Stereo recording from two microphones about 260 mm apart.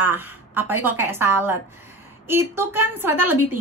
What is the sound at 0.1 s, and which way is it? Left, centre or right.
A woman's voice, centre.